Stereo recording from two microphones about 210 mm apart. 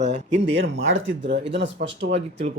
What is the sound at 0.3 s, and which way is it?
Speech, 55° right (ahead or behind).